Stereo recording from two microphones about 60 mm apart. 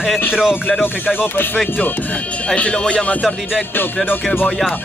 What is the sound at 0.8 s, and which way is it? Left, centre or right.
Speech, left.